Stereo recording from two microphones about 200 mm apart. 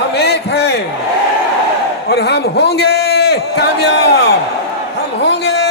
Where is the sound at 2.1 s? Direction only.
55° left (ahead or behind).